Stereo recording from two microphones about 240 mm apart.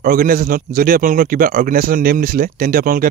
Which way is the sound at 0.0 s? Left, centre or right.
Right.